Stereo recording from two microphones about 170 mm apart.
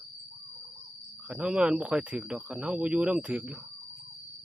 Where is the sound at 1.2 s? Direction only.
5° right (ahead or behind).